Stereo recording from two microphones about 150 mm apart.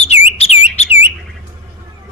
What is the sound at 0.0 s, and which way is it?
Bird, 45° left (ahead or behind).